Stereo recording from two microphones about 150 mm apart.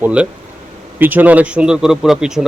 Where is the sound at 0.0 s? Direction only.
10° right (ahead or behind).